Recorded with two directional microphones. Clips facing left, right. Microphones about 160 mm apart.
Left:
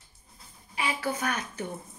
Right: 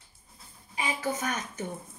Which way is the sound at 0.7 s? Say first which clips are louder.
Left 1 dB; 20° right (ahead or behind).